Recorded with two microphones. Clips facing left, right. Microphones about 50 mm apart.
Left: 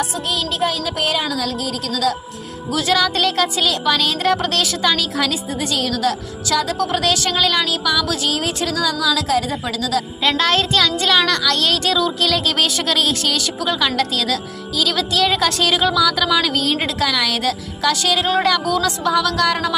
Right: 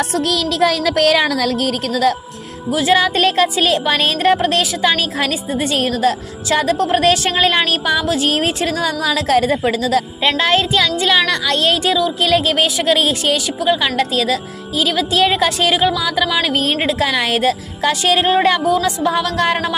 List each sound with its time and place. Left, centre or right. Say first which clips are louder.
0.3 s speech: right 5 dB; right
2.7 s speech: right 3 dB; right
8.8 s music: right 1 dB; right
10.2 s a woman's voice: right 1 dB; centre
16.6 s speech: right 3 dB; right
18.6 s a woman's voice: right 3 dB; centre
19.0 s a woman's voice: left 2 dB; right